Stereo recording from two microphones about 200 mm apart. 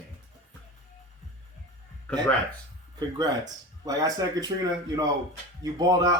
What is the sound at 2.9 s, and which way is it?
Speech, 20° right (ahead or behind).